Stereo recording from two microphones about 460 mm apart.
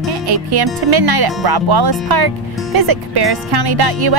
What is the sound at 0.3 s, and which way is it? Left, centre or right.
Speech, right.